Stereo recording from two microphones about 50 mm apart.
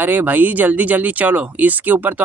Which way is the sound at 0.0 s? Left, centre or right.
Right.